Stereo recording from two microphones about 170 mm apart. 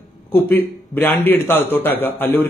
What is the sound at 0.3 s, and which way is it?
A man's voice, 10° left (ahead or behind).